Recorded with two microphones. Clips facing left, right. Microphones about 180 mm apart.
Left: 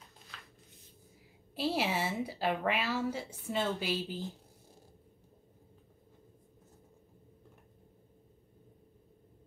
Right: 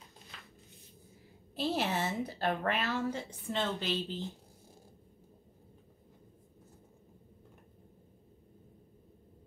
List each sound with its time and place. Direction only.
1.5 s a woman's voice: 10° left (ahead or behind)